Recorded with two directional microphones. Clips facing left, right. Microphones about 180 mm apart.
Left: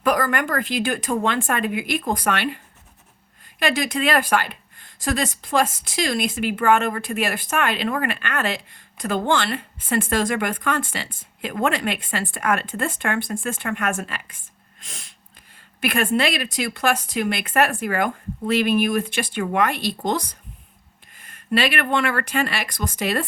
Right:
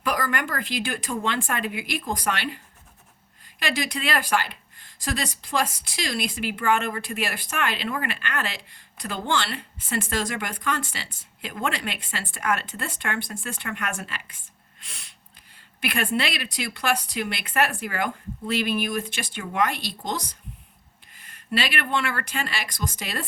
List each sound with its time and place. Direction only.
0.0 s speech: 50° left (ahead or behind)
3.6 s speech: 50° left (ahead or behind)